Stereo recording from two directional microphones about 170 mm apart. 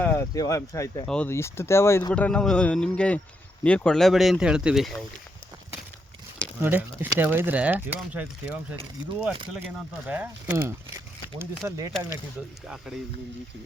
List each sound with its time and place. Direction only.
0.0 s speech: 15° left (ahead or behind)
1.0 s speech: 5° left (ahead or behind)
6.6 s speech: 10° right (ahead or behind)
10.1 s speech: 10° right (ahead or behind)
12.6 s speech: centre (ahead or behind)